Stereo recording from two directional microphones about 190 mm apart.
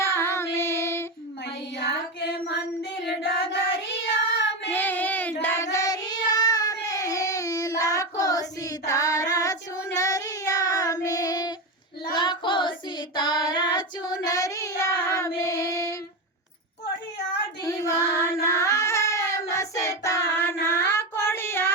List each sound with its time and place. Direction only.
0.0 s child singing: 15° left (ahead or behind)
3.2 s child singing: 65° left (ahead or behind)
4.7 s child singing: 10° left (ahead or behind)
17.6 s child singing: 15° left (ahead or behind)